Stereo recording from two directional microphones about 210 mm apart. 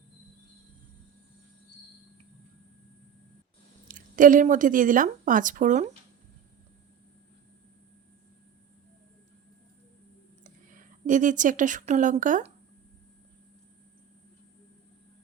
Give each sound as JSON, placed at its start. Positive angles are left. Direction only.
{"t": 3.8, "sound": "speech", "side_deg": -40}
{"t": 10.4, "sound": "speech", "side_deg": -40}